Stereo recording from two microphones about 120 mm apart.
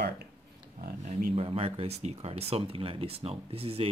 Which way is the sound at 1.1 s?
55° right (ahead or behind).